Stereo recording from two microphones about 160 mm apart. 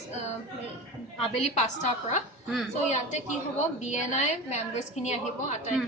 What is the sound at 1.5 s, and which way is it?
A woman's voice, 45° left (ahead or behind).